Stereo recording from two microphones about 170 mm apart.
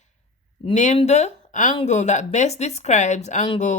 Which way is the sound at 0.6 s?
45° left (ahead or behind).